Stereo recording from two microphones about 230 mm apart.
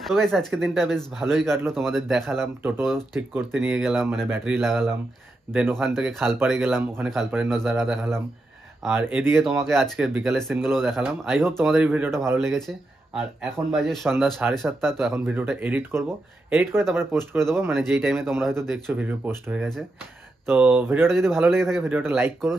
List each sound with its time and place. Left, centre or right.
0.0 s a man's voice: centre
9.7 s a man's voice: centre